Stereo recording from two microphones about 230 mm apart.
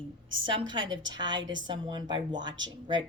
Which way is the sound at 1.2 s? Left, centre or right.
Centre.